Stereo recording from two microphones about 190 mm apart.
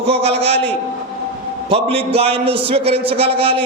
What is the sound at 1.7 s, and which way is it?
A man's voice, 30° right (ahead or behind).